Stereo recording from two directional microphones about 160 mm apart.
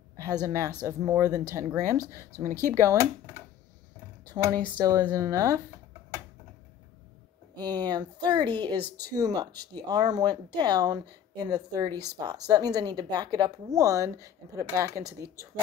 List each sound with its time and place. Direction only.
0.4 s speech: 20° right (ahead or behind)
4.4 s speech: 30° right (ahead or behind)
7.5 s speech: 25° right (ahead or behind)